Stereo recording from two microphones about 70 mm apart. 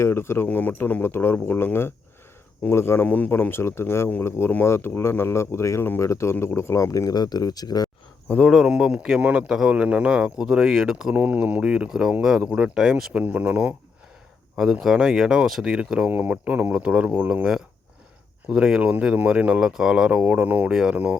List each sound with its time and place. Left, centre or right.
0.0 s speech: left
0.4 s speech: left
7.1 s speech: left
8.4 s speech: centre
8.7 s speech: centre
11.1 s speech: right; by 13.1 s centre
13.1 s speech: right
14.5 s speech: centre
16.0 s speech: right
20.7 s speech: centre
20.9 s speech: right